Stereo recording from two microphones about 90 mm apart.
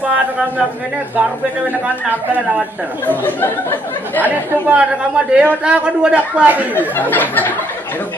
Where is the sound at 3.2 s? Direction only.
20° left (ahead or behind).